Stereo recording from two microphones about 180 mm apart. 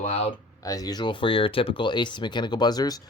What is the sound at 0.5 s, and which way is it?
Speech, 20° left (ahead or behind).